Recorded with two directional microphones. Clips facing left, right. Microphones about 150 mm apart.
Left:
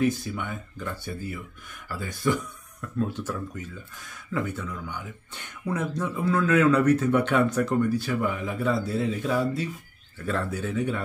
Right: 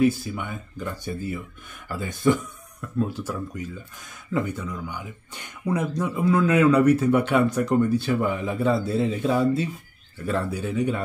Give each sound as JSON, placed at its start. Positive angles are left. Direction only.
{"t": 0.0, "sound": "speech", "side_deg": -10}
{"t": 2.8, "sound": "speech", "side_deg": -10}
{"t": 7.9, "sound": "speech", "side_deg": -25}
{"t": 10.1, "sound": "speech", "side_deg": -15}